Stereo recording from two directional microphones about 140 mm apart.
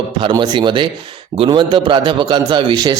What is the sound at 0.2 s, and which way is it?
A man's voice, 35° right (ahead or behind).